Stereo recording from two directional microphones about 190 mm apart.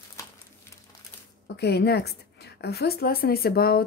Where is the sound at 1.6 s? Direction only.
60° left (ahead or behind).